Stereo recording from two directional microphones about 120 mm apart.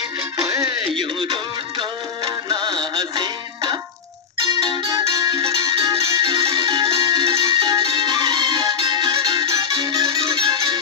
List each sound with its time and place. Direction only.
0.7 s music: 40° right (ahead or behind)